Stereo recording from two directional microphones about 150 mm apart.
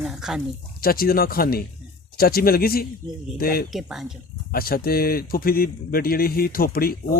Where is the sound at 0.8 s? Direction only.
80° left.